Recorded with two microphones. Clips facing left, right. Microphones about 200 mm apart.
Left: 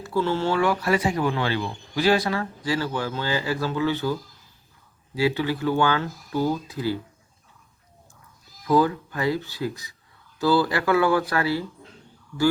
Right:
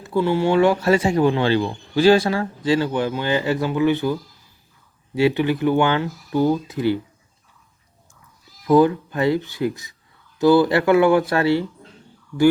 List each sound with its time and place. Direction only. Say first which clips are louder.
0.0 s speech: right 4 dB; 15° right (ahead or behind)
8.6 s speech: right 6 dB; 20° right (ahead or behind)